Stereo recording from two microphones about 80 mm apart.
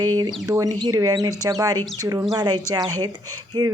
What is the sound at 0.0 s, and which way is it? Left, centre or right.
Speech, right.